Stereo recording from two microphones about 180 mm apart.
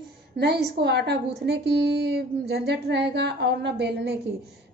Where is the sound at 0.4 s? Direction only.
70° right (ahead or behind).